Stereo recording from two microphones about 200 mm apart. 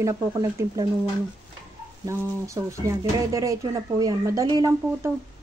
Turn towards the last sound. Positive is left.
turn(degrees=-20)  # may be behind; listen again after turning